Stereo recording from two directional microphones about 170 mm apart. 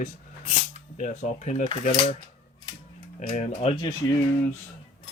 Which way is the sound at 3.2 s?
40° left (ahead or behind).